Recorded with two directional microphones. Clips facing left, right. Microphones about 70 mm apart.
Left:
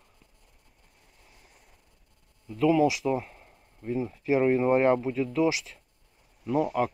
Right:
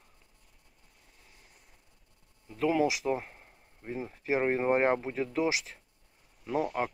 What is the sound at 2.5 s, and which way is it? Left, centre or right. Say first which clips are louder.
Speech: left 5 dB; right.